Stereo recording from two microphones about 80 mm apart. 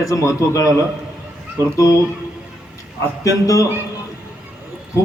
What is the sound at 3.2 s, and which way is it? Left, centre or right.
Speech, left.